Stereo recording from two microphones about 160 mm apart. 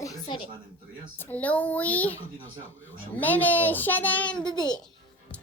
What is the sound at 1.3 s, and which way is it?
Speech, 10° left (ahead or behind).